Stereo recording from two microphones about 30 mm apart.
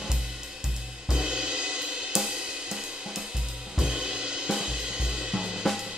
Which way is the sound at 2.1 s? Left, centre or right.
Centre.